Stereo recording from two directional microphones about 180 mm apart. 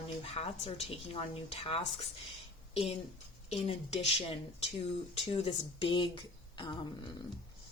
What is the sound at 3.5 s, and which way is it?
A woman's voice, 35° left (ahead or behind).